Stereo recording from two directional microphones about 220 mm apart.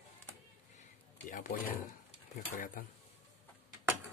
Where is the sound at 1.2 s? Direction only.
40° left (ahead or behind).